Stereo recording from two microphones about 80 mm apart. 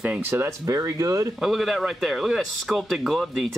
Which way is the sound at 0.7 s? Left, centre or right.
Right.